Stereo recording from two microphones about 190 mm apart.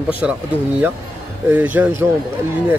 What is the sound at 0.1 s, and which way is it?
Speech, 5° right (ahead or behind).